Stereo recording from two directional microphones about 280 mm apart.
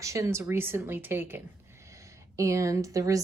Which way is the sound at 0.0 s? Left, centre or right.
Centre.